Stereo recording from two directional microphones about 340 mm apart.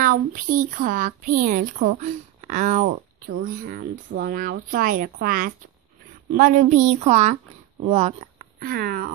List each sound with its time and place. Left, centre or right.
0.0 s speech: right